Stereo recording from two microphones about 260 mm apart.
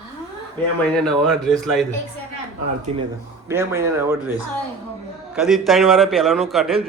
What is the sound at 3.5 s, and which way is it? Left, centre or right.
Speech, centre.